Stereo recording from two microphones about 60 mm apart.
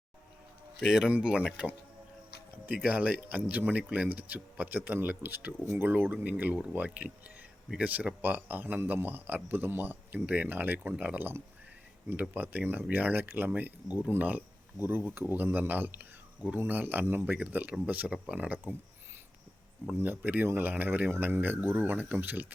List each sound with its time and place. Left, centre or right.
0.9 s speech: centre
2.8 s speech: right
19.9 s speech: right